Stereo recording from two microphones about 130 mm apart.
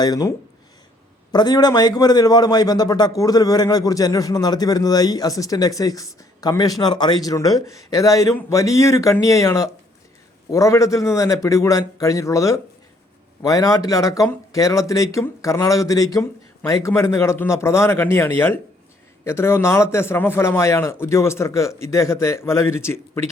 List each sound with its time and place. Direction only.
0.0 s a man's voice: 30° left (ahead or behind)